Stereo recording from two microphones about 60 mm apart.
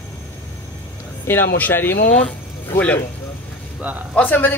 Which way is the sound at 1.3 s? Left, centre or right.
Left.